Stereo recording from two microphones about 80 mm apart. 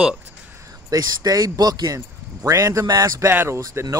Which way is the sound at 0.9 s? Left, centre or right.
Right.